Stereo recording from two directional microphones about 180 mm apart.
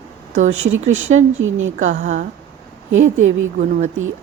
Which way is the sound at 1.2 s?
90° right.